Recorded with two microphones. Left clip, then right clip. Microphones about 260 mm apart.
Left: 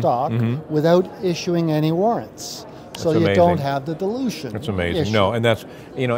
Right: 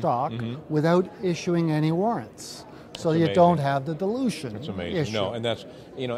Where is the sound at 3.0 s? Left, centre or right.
Right.